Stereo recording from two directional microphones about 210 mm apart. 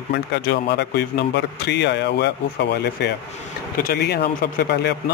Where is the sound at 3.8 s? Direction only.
50° left (ahead or behind).